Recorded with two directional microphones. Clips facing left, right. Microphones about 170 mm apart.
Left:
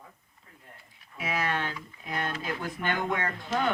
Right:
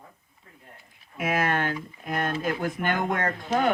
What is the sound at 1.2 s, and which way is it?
Speech, 50° right (ahead or behind).